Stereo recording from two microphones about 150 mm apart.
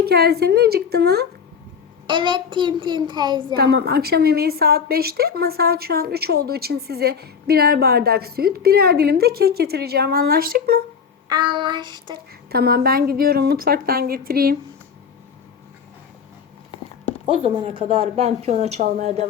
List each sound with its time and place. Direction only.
0.0 s a woman's voice: 90° right
2.0 s speech: 30° right (ahead or behind)
3.5 s a woman's voice: 90° right
11.3 s speech: 30° right (ahead or behind)
12.5 s a woman's voice: 90° right
17.2 s speech: 35° right (ahead or behind)